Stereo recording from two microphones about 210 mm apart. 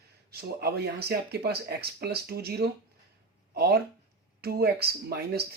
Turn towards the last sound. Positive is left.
turn(degrees=-50)  # may be behind; listen again after turning